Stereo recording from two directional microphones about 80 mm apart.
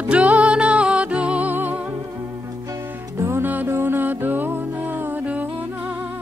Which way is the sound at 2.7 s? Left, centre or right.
Right.